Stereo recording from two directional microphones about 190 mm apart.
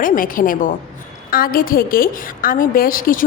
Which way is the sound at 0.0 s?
45° left (ahead or behind).